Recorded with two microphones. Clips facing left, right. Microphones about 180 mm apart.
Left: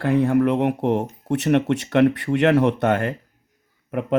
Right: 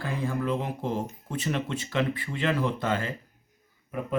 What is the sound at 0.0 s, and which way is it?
Speech, 65° left (ahead or behind).